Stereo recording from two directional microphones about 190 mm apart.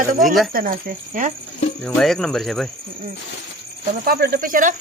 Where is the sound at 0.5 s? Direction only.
50° right (ahead or behind).